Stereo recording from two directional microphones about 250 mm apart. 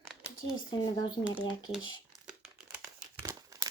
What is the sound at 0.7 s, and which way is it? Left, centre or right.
Speech, centre.